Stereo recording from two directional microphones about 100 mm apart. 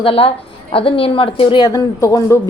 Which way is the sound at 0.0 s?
65° left (ahead or behind).